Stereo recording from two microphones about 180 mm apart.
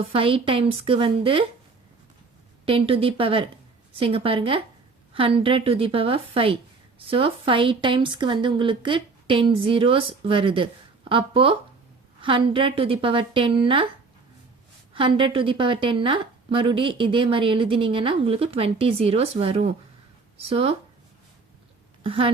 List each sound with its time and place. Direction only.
0.1 s a woman's voice: 30° right (ahead or behind)
2.6 s a woman's voice: 30° right (ahead or behind)
14.9 s a woman's voice: 30° right (ahead or behind)
22.0 s speech: 30° right (ahead or behind)